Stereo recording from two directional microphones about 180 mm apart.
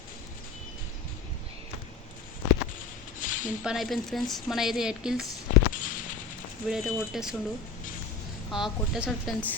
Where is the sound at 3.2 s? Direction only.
45° left (ahead or behind).